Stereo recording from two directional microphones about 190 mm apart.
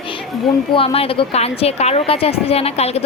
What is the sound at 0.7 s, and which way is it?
A woman's voice, 30° left (ahead or behind).